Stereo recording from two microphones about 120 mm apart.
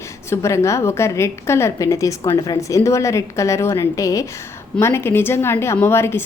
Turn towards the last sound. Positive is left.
turn(degrees=20)  # may be behind; listen again after turning